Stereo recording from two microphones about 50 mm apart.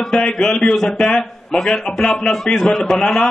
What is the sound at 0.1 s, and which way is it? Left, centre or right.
A man's voice, centre.